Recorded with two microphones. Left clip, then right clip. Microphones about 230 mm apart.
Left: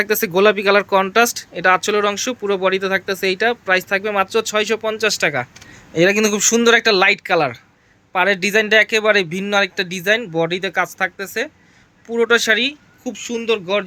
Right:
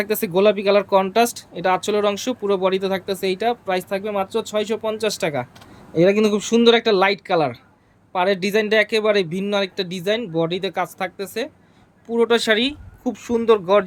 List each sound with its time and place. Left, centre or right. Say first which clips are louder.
0.0 s speech: left 3 dB; centre